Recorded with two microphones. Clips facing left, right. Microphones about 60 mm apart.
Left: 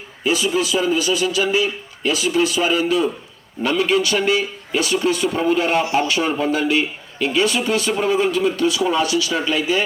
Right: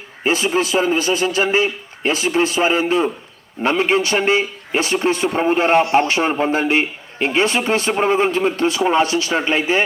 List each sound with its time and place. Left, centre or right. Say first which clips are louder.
0.3 s a man's voice: right 1 dB; right
5.8 s speech: right 4 dB; right
6.1 s a man's voice: right 2 dB; right